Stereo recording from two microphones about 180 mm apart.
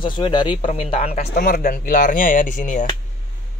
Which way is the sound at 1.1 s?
55° left (ahead or behind).